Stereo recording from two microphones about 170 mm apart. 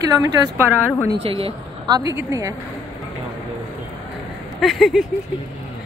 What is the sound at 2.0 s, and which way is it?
Speech, 20° right (ahead or behind).